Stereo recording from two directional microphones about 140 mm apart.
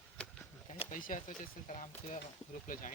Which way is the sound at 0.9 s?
75° left (ahead or behind).